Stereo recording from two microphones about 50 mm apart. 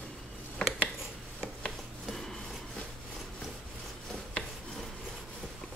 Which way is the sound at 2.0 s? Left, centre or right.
Centre.